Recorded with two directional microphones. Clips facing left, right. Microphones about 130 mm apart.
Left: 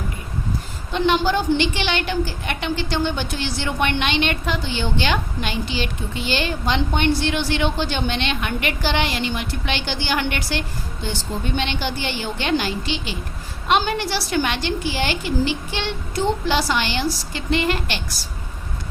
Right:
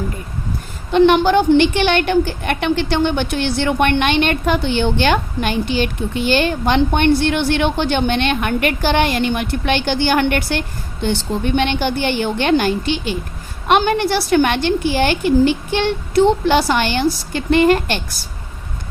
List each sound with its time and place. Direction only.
0.9 s a woman's voice: 60° right (ahead or behind)
16.1 s a woman's voice: 60° right (ahead or behind)